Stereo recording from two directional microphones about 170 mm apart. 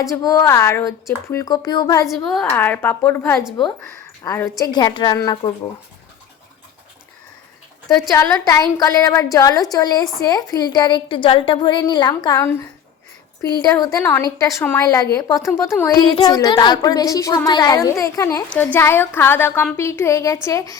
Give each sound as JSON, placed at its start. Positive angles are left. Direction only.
{"t": 0.0, "sound": "a woman's voice", "side_deg": 20}
{"t": 2.0, "sound": "a woman's voice", "side_deg": 0}
{"t": 7.9, "sound": "a woman's voice", "side_deg": 20}
{"t": 13.6, "sound": "a woman's voice", "side_deg": 20}